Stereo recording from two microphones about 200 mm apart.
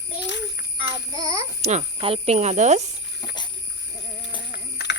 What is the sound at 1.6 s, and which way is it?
Speech, 30° right (ahead or behind).